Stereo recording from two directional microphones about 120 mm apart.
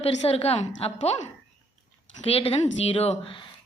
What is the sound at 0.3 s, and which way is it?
Speech, 60° left (ahead or behind).